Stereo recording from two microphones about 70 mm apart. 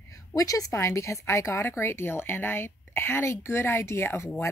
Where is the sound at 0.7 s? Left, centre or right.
Left.